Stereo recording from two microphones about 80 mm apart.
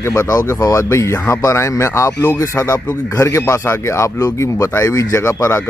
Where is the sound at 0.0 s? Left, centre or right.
Left.